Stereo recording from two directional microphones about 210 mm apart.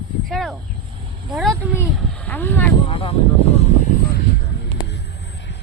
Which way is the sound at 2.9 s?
30° left (ahead or behind).